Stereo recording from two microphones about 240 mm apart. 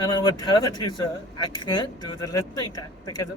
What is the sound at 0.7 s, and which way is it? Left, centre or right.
Speech, centre.